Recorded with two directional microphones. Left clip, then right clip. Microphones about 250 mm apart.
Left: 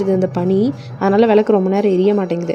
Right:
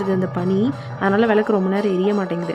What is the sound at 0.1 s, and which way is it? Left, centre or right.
Speech, centre.